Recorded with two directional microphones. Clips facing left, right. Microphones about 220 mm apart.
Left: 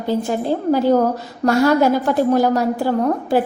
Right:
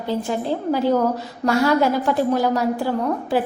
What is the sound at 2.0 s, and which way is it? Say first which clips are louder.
Speech: left 3 dB; 45° left (ahead or behind).